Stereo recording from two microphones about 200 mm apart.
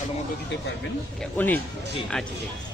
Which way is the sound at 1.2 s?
10° left (ahead or behind).